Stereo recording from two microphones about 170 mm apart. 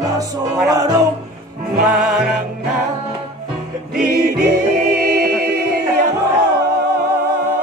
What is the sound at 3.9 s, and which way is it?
Music, 60° right (ahead or behind).